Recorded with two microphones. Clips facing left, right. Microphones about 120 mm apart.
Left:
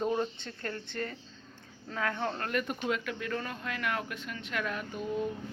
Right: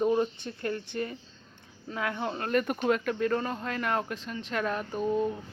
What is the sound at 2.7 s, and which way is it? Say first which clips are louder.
Speech: right 6 dB; 45° right (ahead or behind).